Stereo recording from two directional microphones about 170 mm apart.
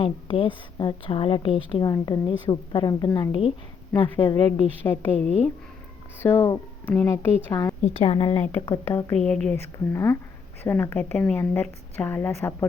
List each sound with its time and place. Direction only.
0.0 s a woman's voice: 30° left (ahead or behind)
4.8 s a woman's voice: 10° left (ahead or behind)
6.2 s a woman's voice: 15° left (ahead or behind)
7.9 s a woman's voice: 35° left (ahead or behind)
8.5 s a woman's voice: 15° left (ahead or behind)